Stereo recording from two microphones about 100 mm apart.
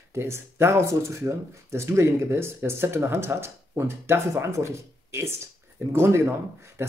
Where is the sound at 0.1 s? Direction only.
25° right (ahead or behind).